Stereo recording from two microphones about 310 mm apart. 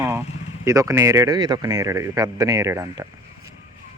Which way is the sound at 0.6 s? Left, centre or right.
Centre.